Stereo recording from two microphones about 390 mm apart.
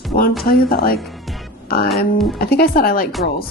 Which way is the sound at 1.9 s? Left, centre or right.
Centre.